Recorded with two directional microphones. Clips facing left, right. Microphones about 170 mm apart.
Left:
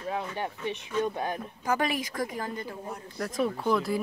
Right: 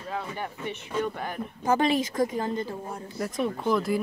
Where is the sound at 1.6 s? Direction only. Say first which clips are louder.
Right 6 dB; 25° right (ahead or behind).